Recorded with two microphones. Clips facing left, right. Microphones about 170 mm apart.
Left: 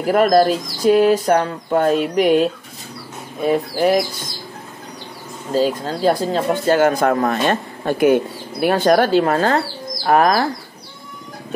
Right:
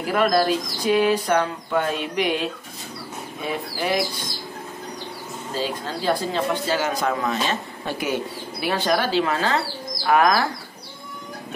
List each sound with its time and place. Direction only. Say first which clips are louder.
0.0 s speech: left 6 dB; 45° left (ahead or behind)
3.4 s speech: left 10 dB; 45° left (ahead or behind)
5.5 s speech: left 9 dB; 45° left (ahead or behind)
10.0 s speech: left 3 dB; 40° left (ahead or behind)